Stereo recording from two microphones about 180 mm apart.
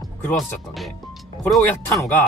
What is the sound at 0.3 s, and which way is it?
Speech, centre (ahead or behind).